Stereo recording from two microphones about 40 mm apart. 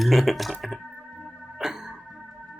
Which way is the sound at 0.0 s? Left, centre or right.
Centre.